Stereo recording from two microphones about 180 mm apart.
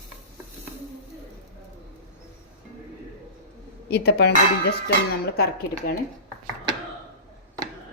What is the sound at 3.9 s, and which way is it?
A woman's voice, 70° left (ahead or behind).